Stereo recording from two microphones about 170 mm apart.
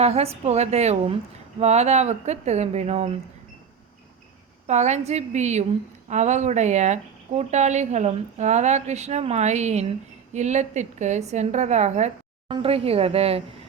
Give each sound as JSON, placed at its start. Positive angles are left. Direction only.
{"t": 0.0, "sound": "speech", "side_deg": -35}
{"t": 4.6, "sound": "speech", "side_deg": -40}